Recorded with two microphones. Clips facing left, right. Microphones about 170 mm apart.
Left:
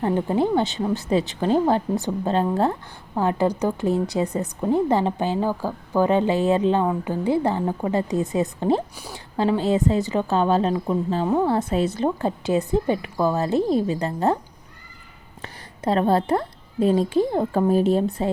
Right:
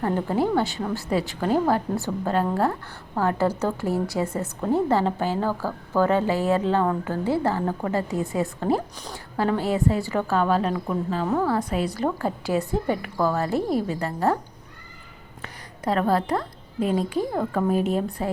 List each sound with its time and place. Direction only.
0.0 s a woman's voice: 20° left (ahead or behind)
15.4 s a woman's voice: 25° left (ahead or behind)